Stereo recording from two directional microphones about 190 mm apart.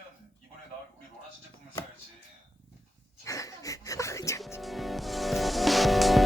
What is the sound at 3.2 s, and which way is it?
Music, 15° left (ahead or behind).